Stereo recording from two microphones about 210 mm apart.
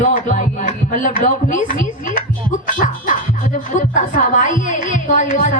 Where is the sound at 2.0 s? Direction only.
40° left (ahead or behind).